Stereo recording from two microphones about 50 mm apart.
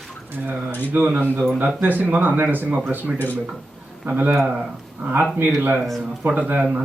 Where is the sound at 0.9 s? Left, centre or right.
Right.